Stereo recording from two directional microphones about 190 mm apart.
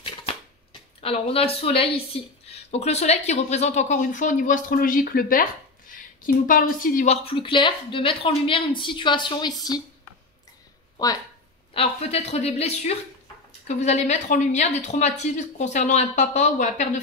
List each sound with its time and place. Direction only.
0.0 s a sound: 30° left (ahead or behind)
1.0 s a woman's voice: 30° left (ahead or behind)
7.2 s a woman's voice: 25° left (ahead or behind)
11.7 s a woman's voice: 30° left (ahead or behind)